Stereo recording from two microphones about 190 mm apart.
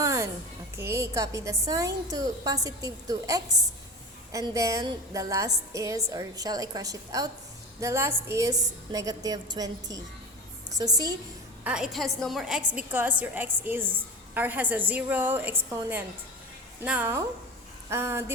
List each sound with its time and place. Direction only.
0.0 s a sound: 15° right (ahead or behind)
0.8 s a woman's voice: 15° right (ahead or behind)
11.6 s a woman's voice: 5° right (ahead or behind)